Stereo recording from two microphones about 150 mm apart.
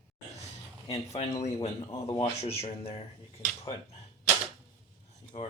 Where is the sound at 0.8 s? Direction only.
45° left (ahead or behind).